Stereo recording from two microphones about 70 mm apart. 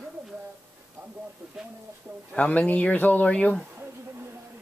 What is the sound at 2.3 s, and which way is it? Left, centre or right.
Speech, centre.